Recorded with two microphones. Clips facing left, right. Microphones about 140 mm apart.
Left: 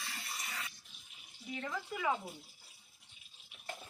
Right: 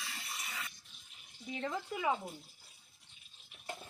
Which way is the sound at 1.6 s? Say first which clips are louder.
Right 2 dB; 25° right (ahead or behind).